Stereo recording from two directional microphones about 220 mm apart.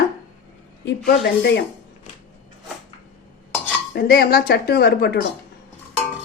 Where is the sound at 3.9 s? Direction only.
40° left (ahead or behind).